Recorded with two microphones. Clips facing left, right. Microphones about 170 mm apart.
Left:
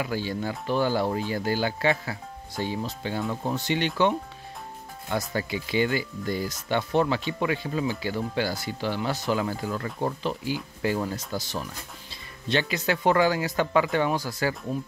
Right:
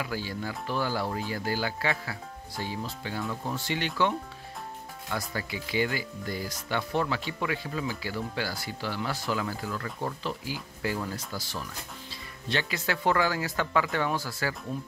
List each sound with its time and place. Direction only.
0.0 s speech: 25° left (ahead or behind)
5.1 s speech: 25° left (ahead or behind)